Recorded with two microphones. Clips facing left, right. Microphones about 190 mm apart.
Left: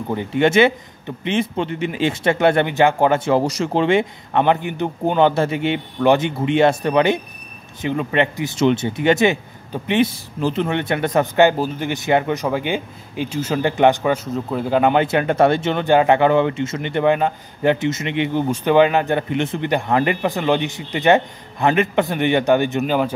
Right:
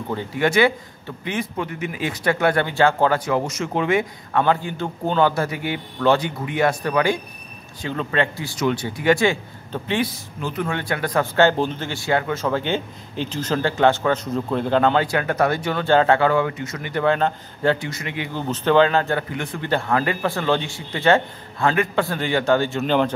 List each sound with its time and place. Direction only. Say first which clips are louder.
0.1 s a man's voice: left 4 dB; 20° left (ahead or behind)
3.3 s a man's voice: left 5 dB; 35° left (ahead or behind); by 22.9 s 15° left (ahead or behind)